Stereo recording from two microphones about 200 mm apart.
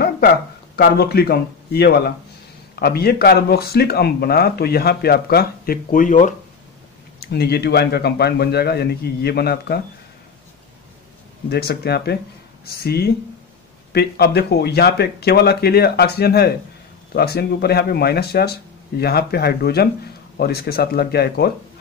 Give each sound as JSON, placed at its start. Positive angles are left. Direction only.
{"t": 0.7, "sound": "speech", "side_deg": 55}
{"t": 7.2, "sound": "speech", "side_deg": 55}
{"t": 11.4, "sound": "speech", "side_deg": 55}